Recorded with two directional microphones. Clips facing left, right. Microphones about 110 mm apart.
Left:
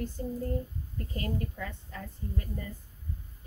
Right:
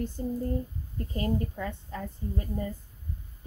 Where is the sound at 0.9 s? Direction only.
30° right (ahead or behind).